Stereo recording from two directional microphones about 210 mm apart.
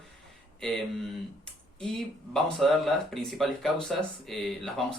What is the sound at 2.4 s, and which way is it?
Speech, centre (ahead or behind).